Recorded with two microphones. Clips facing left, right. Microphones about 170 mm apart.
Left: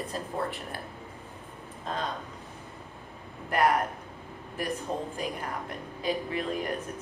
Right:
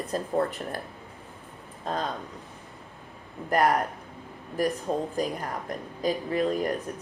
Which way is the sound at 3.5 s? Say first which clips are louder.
Right 2 dB; 40° right (ahead or behind).